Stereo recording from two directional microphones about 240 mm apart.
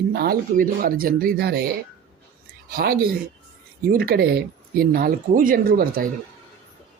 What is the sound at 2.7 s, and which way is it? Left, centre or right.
Speech, right.